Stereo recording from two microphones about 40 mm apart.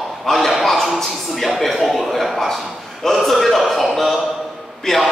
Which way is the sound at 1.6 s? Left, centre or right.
Centre.